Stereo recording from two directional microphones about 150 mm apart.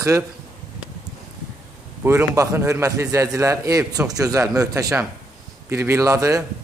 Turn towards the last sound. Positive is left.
turn(degrees=-20)  # may be behind; listen again after turning